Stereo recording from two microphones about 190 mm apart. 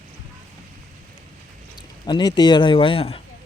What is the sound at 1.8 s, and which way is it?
Speech, 25° left (ahead or behind).